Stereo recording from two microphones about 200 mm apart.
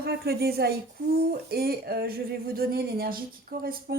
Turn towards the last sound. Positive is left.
turn(degrees=-45)  # may be behind; listen again after turning